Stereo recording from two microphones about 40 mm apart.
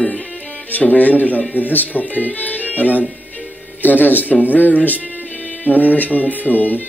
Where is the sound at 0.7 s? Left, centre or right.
Left.